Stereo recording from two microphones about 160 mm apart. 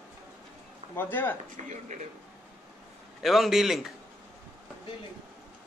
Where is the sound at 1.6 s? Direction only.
50° right (ahead or behind).